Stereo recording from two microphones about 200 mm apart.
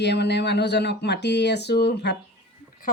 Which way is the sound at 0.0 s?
55° left (ahead or behind).